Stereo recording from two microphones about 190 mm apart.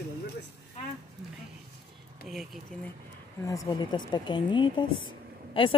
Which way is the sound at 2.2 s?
Centre (ahead or behind).